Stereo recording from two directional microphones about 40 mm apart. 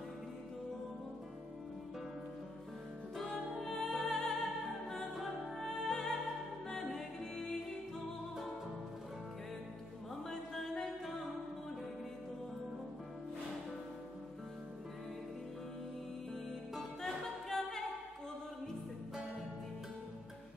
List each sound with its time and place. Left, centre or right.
3.6 s music: centre
10.3 s music: centre
17.0 s a capella: centre